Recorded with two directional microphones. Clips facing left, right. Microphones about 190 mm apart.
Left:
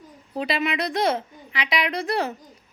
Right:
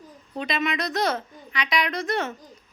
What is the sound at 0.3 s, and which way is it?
A woman's voice, 30° left (ahead or behind).